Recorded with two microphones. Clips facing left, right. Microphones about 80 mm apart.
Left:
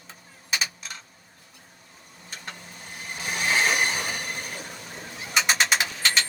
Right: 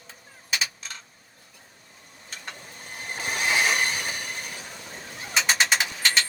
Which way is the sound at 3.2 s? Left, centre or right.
Right.